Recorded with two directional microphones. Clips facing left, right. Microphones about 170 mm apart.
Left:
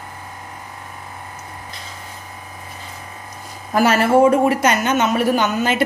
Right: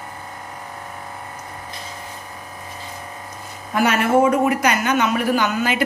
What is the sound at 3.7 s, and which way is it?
A woman's voice, 35° left (ahead or behind).